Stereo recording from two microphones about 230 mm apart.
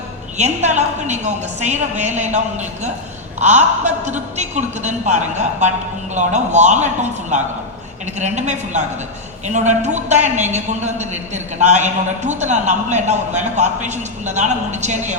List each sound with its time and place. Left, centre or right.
0.3 s a man's voice: right